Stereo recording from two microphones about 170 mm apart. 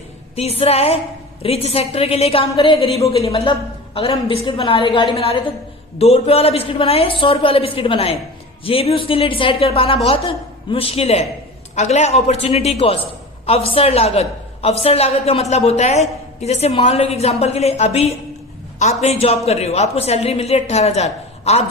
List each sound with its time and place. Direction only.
0.3 s a man's voice: 35° left (ahead or behind)